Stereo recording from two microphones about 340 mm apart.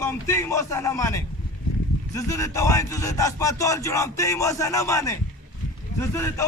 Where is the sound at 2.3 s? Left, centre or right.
Centre.